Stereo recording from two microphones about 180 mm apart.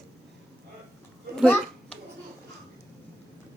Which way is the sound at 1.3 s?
5° left (ahead or behind).